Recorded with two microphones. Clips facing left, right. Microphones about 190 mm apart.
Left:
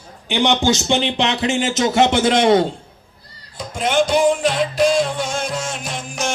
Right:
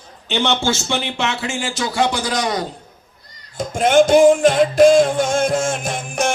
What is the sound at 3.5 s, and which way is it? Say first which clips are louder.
Music: right 5 dB; 50° right (ahead or behind).